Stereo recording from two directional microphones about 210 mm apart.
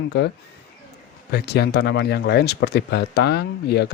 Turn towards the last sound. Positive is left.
turn(degrees=50)  # may be behind; listen again after turning